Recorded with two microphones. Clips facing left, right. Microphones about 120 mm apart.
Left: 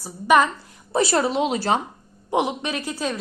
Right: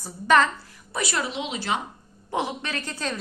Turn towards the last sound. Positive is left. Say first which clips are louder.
# left 4 dB
turn(degrees=5)  # may be behind; listen again after turning